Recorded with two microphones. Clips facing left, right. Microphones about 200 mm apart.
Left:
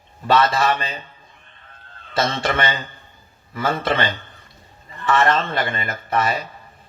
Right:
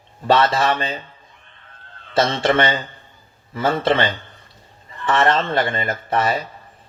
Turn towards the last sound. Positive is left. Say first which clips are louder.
# right 2 dB
turn(degrees=-30)  # may be behind; listen again after turning